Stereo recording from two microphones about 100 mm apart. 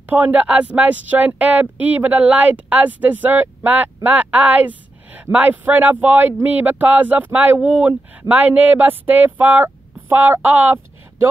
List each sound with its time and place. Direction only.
0.0 s speech: 20° right (ahead or behind)